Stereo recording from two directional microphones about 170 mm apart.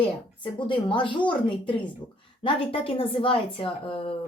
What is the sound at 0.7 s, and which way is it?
Speech, 30° left (ahead or behind).